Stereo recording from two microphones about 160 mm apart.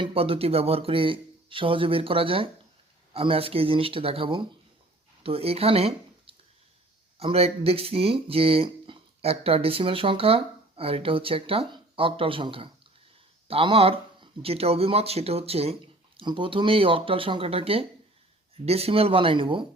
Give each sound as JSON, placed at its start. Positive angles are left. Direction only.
{"t": 0.0, "sound": "speech", "side_deg": -35}